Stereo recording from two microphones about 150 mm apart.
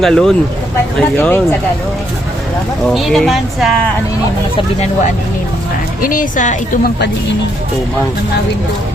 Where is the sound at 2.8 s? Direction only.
Centre (ahead or behind).